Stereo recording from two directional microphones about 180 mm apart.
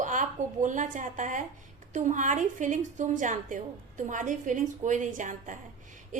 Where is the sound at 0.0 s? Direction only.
45° right (ahead or behind).